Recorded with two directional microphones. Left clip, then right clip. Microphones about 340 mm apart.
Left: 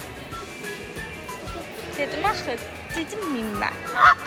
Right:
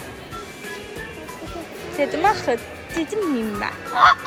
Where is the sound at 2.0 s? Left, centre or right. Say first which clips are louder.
Right 6 dB; centre.